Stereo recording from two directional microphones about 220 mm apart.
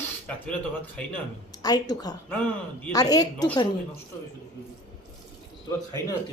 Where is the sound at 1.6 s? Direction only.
20° left (ahead or behind).